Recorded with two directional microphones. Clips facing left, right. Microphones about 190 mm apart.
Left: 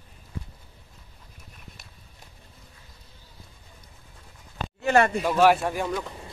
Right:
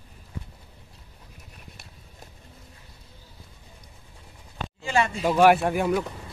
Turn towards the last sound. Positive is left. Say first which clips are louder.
# right 5 dB
turn(degrees=-5)  # may be behind; listen again after turning